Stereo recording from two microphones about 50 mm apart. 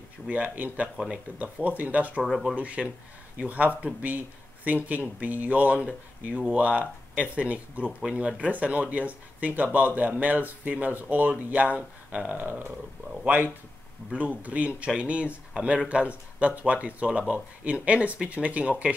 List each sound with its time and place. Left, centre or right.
0.3 s speech: right
2.2 s speech: centre
2.5 s speech: right
8.0 s speech: centre
12.4 s speech: right